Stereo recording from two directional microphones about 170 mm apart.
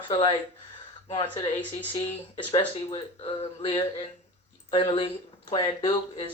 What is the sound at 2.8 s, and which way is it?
Speech, 30° left (ahead or behind).